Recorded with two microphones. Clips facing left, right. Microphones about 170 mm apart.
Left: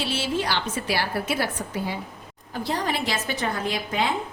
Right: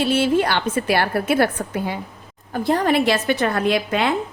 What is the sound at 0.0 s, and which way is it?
A woman's voice, 55° right (ahead or behind).